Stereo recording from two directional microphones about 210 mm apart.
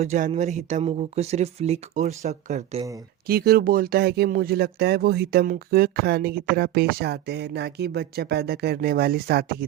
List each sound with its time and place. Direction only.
0.0 s speech: 35° right (ahead or behind)
3.2 s speech: 45° right (ahead or behind)